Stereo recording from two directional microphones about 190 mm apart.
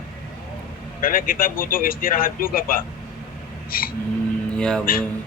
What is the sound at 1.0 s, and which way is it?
Speech, 50° left (ahead or behind).